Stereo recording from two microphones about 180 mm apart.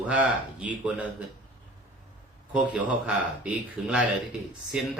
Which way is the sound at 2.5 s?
10° right (ahead or behind).